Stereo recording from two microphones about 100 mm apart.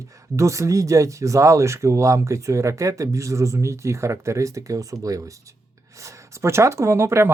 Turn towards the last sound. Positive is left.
turn(degrees=-25)  # may be behind; listen again after turning